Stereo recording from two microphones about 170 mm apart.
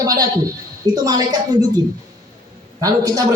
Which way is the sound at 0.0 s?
20° right (ahead or behind).